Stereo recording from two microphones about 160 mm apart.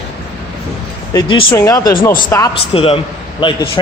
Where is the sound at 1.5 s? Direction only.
20° left (ahead or behind).